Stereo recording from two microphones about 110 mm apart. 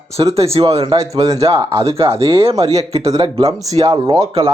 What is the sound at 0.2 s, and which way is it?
Speech, 65° right (ahead or behind).